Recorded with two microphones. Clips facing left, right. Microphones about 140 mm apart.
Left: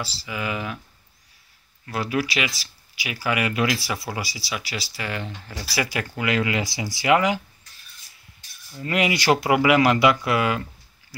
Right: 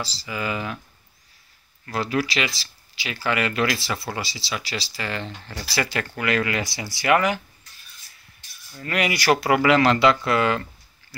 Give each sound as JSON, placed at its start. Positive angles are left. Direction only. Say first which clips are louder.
{"t": 0.0, "sound": "speech", "louder": "right 1 dB", "side_deg": 5}
{"t": 1.9, "sound": "speech", "louder": "right 1 dB", "side_deg": 5}
{"t": 8.7, "sound": "speech", "louder": "left 2 dB", "side_deg": 20}